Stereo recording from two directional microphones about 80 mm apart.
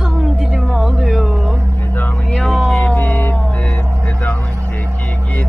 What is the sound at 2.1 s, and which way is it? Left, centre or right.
Speech, centre.